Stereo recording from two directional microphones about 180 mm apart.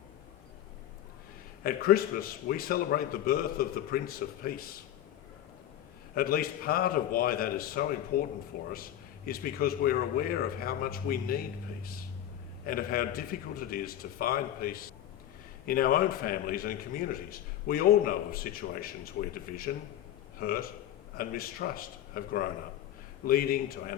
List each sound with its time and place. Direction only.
1.6 s speech: 55° left (ahead or behind)
6.1 s a man's voice: 55° left (ahead or behind)